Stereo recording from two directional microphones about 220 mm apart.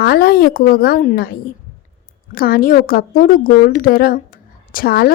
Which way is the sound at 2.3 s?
40° left (ahead or behind).